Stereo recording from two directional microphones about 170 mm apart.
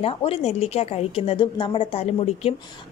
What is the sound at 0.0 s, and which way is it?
A woman's voice, 35° left (ahead or behind).